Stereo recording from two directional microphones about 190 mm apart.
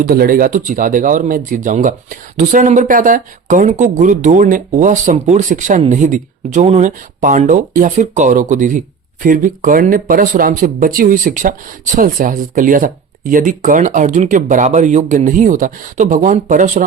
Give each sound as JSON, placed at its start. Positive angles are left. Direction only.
{"t": 0.0, "sound": "speech", "side_deg": -50}